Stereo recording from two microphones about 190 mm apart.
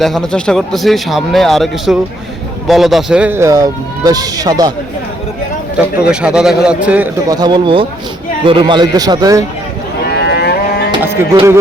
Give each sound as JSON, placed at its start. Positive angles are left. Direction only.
{"t": 0.0, "sound": "a man's voice", "side_deg": 0}
{"t": 6.1, "sound": "a man's voice", "side_deg": -5}
{"t": 7.3, "sound": "a man's voice", "side_deg": -20}
{"t": 10.1, "sound": "moo", "side_deg": 60}
{"t": 11.0, "sound": "music", "side_deg": -10}